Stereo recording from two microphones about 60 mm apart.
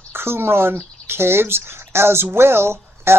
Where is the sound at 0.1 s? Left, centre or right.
Right.